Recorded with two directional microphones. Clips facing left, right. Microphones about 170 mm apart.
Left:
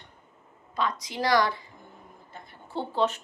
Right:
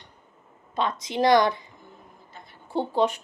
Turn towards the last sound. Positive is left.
turn(degrees=-15)  # may be behind; listen again after turning